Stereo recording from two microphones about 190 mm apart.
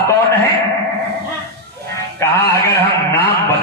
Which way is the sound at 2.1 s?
15° left (ahead or behind).